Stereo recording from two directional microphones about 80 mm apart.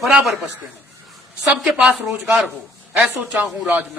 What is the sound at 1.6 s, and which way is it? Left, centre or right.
Speech, centre.